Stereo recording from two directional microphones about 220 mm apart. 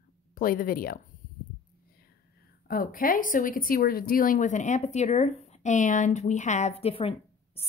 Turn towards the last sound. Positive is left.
turn(degrees=25)  # may be behind; listen again after turning